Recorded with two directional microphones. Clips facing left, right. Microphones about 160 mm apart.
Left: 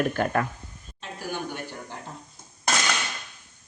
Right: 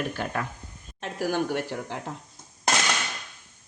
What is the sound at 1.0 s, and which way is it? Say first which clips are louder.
Speech: right 6 dB; 90° right.